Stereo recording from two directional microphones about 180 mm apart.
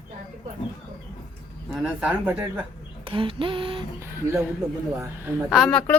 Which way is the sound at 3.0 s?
30° right (ahead or behind).